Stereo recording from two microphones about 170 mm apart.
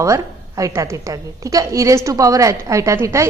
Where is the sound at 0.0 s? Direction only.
20° right (ahead or behind).